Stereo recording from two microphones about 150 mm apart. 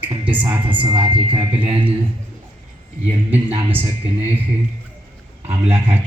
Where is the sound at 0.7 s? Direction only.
35° right (ahead or behind).